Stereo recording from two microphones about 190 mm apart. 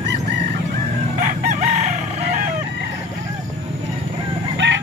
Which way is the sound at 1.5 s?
35° right (ahead or behind).